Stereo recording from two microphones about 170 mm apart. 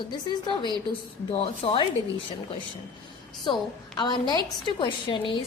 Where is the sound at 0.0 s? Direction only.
25° left (ahead or behind).